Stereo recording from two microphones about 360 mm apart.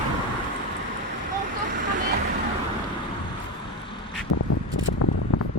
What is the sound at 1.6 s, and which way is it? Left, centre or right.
Vehicle, right.